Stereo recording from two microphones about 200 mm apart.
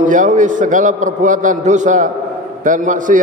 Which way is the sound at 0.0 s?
40° right (ahead or behind).